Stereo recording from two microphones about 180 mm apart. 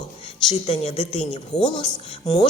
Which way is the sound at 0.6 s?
35° left (ahead or behind).